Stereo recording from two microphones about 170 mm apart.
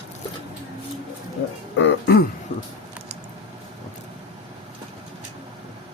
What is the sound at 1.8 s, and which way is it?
Throat clearing, 80° left.